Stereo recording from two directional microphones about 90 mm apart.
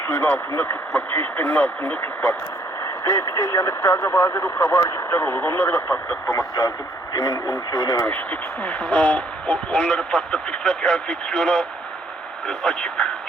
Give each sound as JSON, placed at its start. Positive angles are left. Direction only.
{"t": 0.1, "sound": "speech", "side_deg": 25}
{"t": 2.8, "sound": "speech", "side_deg": 35}
{"t": 8.0, "sound": "speech", "side_deg": 20}